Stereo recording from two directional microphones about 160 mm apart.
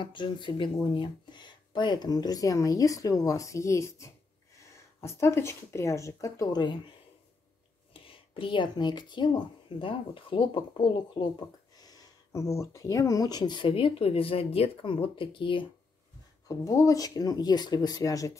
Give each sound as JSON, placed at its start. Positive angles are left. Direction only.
{"t": 0.0, "sound": "speech", "side_deg": 30}
{"t": 7.9, "sound": "speech", "side_deg": 35}
{"t": 16.4, "sound": "speech", "side_deg": 20}